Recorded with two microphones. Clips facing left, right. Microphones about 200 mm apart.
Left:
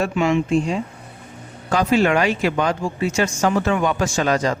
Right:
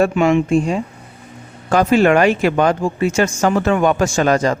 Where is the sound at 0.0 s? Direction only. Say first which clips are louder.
Right 5 dB; 55° right (ahead or behind).